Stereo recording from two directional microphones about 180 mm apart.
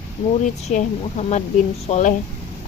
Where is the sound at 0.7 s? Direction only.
40° left (ahead or behind).